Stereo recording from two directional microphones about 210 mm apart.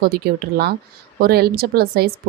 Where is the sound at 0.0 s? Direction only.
45° right (ahead or behind).